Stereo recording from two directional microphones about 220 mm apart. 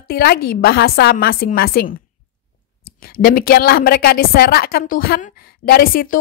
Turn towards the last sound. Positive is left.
turn(degrees=40)  # may be behind; listen again after turning